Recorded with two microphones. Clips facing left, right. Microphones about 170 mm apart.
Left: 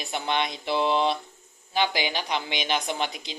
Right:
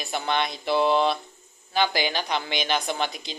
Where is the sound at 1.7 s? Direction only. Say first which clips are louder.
Right 2 dB; 15° left (ahead or behind).